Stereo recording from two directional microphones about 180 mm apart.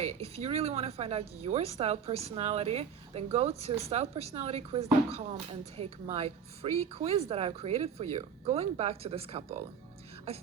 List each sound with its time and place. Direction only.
0.0 s speech: 35° right (ahead or behind)